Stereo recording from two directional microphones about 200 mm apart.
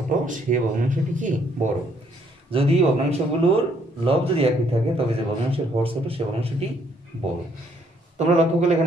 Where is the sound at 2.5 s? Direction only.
30° right (ahead or behind).